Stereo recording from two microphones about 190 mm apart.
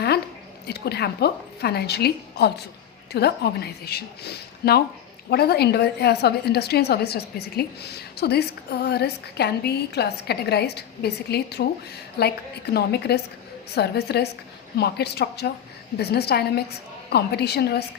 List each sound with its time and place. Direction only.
0.7 s a woman's voice: 60° left (ahead or behind)